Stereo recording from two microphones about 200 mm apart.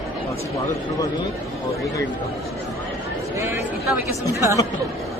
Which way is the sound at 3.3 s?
15° right (ahead or behind).